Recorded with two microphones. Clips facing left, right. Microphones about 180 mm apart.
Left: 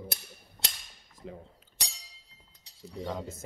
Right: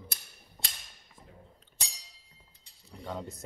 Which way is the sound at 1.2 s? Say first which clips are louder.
Left 14 dB; 90° left.